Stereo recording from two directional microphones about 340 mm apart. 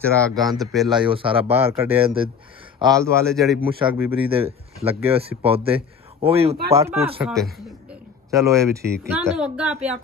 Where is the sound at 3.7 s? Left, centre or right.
Centre.